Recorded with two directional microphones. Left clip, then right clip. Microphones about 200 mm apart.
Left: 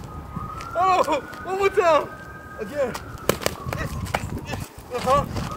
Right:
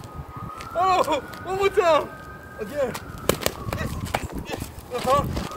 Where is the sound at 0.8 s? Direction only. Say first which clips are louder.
Left 1 dB; centre (ahead or behind).